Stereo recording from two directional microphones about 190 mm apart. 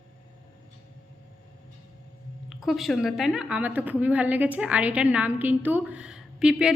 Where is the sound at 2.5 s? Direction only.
Centre (ahead or behind).